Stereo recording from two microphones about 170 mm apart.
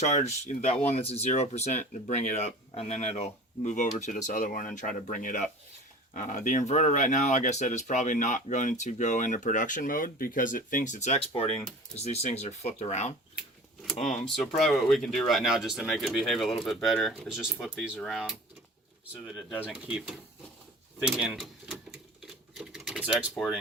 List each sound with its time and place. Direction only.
0.0 s speech: 45° left (ahead or behind)
13.8 s speech: centre (ahead or behind)
21.2 s speech: centre (ahead or behind)
22.2 s typing: centre (ahead or behind)
23.4 s speech: 10° left (ahead or behind)